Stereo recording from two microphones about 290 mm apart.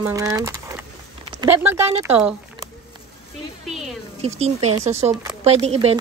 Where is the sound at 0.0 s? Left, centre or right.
Centre.